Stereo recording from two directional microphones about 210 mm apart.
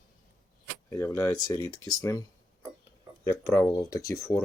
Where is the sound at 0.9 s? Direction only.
15° left (ahead or behind).